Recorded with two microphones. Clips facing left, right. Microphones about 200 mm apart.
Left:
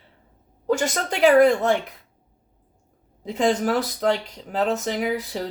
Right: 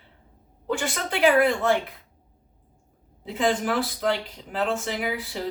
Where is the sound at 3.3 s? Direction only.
40° left (ahead or behind).